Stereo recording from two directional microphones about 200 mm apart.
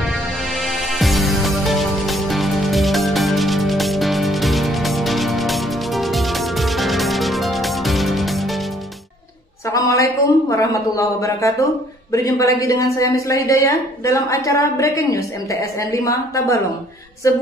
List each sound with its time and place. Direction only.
0.0 s music: centre (ahead or behind)
9.7 s a sound: 15° left (ahead or behind)
12.1 s a woman's voice: 15° left (ahead or behind)